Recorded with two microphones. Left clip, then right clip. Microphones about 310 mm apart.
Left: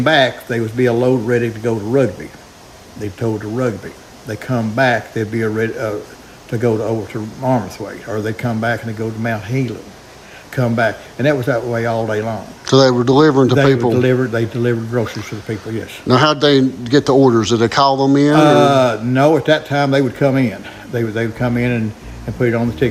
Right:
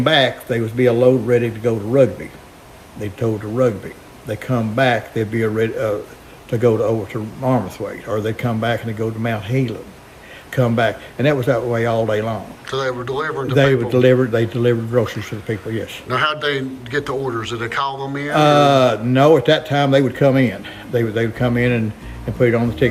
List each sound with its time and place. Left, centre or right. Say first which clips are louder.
0.0 s a man's voice: left 2 dB; centre
12.6 s a man's voice: left 11 dB; centre
13.6 s speech: left 1 dB; centre
16.0 s a man's voice: left 7 dB; centre